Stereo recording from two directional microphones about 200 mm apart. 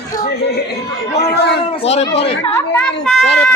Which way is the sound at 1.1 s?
55° left (ahead or behind).